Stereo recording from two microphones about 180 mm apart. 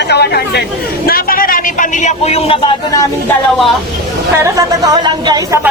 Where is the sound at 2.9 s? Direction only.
20° left (ahead or behind).